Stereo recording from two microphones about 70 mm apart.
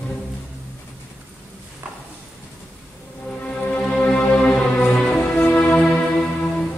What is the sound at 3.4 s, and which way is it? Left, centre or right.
Music, left.